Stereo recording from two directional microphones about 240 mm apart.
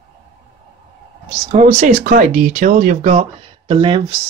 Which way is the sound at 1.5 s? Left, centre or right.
Right.